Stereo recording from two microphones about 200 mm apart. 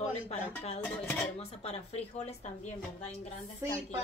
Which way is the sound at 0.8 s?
10° left (ahead or behind).